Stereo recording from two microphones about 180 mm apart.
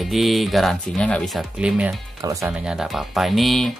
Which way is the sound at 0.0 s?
Centre (ahead or behind).